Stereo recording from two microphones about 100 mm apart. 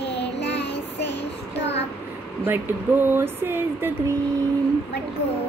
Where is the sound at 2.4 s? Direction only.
20° right (ahead or behind).